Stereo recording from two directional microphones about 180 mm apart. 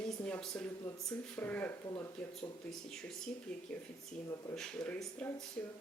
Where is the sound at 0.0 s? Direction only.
5° left (ahead or behind).